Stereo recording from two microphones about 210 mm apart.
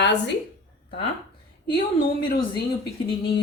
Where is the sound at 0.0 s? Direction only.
55° left (ahead or behind).